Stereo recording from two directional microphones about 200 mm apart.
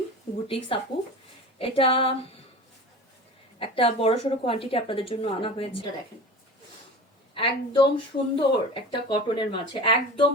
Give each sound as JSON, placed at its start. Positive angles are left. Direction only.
{"t": 0.4, "sound": "speech", "side_deg": 25}
{"t": 3.6, "sound": "speech", "side_deg": 30}
{"t": 7.3, "sound": "speech", "side_deg": 25}